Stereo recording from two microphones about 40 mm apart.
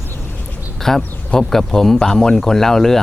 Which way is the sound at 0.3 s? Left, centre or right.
Left.